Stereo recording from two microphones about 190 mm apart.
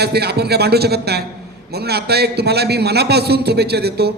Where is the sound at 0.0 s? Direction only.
60° right (ahead or behind).